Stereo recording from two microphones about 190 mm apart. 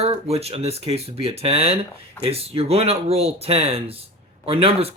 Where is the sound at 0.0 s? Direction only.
35° right (ahead or behind).